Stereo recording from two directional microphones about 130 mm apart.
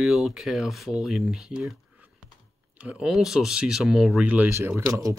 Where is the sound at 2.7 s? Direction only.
10° right (ahead or behind).